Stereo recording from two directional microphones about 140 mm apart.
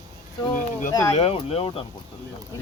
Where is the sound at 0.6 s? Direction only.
65° left (ahead or behind).